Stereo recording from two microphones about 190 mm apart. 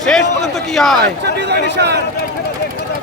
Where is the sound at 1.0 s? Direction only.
60° right (ahead or behind).